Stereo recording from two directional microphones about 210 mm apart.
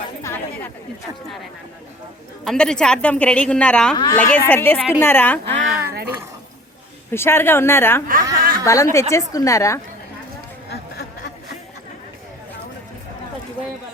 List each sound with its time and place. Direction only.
0.2 s chatter: 15° left (ahead or behind)
2.4 s a woman's voice: 5° left (ahead or behind)
3.9 s a woman's voice: 20° left (ahead or behind)
7.1 s a woman's voice: 10° left (ahead or behind)
8.0 s chuckle: 40° right (ahead or behind)
8.6 s a woman's voice: 15° left (ahead or behind)
10.7 s chatter: 50° left (ahead or behind)